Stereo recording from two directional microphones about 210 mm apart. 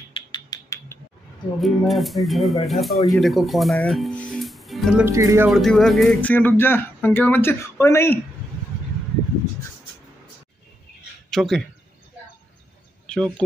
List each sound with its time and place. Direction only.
0.1 s a sound: 20° left (ahead or behind)
1.6 s speech: centre (ahead or behind)
5.0 s speech: 15° right (ahead or behind)
5.5 s speech: centre (ahead or behind)
11.2 s speech: centre (ahead or behind)
13.0 s a sound: 5° left (ahead or behind)